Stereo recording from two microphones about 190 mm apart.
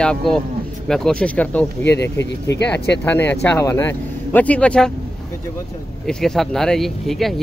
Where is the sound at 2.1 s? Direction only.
65° left (ahead or behind).